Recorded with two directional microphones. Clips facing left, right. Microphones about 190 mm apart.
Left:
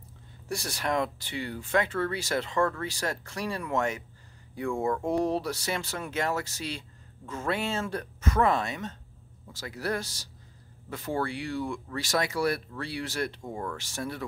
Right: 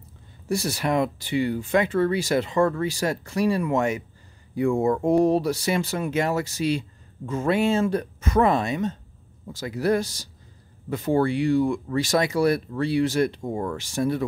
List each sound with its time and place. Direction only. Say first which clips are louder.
0.5 s speech: right 6 dB; 5° right (ahead or behind)
13.4 s speech: right 7 dB; 30° right (ahead or behind)
13.7 s speech: right 11 dB; 15° right (ahead or behind)